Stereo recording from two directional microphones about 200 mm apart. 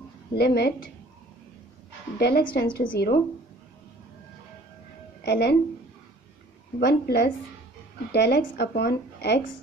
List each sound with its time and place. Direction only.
0.3 s a woman's voice: 55° left (ahead or behind)
2.1 s a woman's voice: 50° left (ahead or behind)
5.2 s speech: 55° left (ahead or behind)
6.8 s a woman's voice: 55° left (ahead or behind)